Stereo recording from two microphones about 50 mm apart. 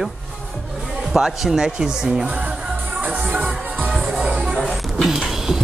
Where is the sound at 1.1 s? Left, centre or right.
Centre.